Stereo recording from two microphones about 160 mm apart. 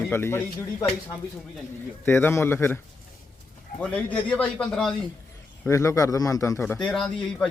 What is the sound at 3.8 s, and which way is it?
A man's voice, 10° left (ahead or behind).